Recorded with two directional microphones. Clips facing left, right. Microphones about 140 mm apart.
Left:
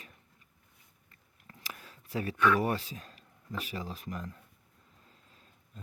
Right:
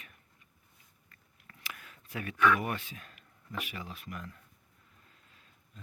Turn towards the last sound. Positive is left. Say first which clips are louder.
# left 4 dB
turn(degrees=35)  # may be behind; listen again after turning